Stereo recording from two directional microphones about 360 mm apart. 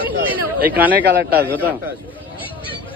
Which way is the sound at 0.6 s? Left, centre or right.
Centre.